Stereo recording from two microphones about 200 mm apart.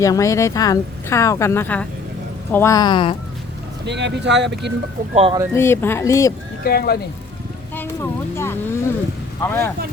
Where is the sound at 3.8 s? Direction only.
60° right (ahead or behind).